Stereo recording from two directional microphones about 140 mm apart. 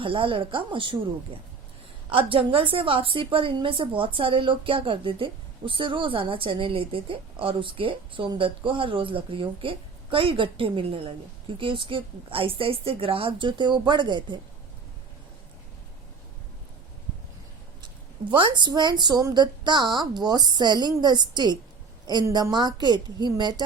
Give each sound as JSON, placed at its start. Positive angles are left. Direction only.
{"t": 0.0, "sound": "a woman's voice", "side_deg": -40}
{"t": 18.3, "sound": "a woman's voice", "side_deg": -35}